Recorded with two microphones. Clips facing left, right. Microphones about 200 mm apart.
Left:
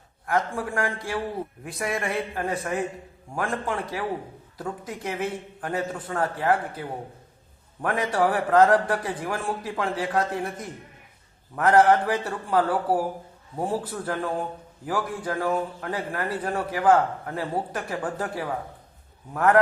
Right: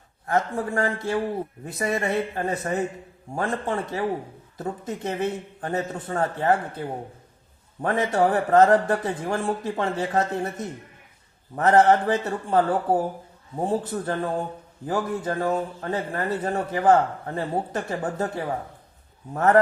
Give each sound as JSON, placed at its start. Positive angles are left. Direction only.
{"t": 0.3, "sound": "speech", "side_deg": -25}
{"t": 7.8, "sound": "speech", "side_deg": -25}